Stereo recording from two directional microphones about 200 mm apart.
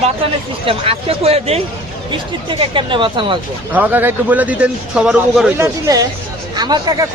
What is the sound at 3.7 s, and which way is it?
A man's voice, 10° right (ahead or behind).